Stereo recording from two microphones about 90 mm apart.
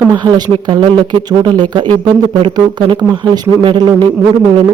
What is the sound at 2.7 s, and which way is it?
Speech, 55° right (ahead or behind).